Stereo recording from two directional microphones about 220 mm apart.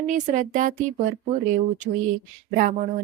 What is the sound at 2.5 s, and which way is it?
Speech, 35° right (ahead or behind).